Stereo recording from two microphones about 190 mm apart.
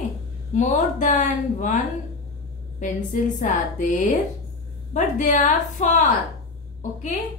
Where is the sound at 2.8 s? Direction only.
40° left (ahead or behind).